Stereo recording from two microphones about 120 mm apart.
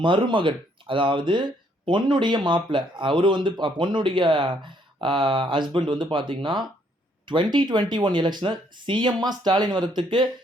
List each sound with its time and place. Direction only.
0.0 s speech: 45° right (ahead or behind)